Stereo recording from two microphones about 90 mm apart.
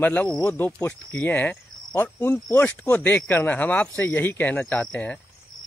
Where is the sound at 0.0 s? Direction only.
15° left (ahead or behind).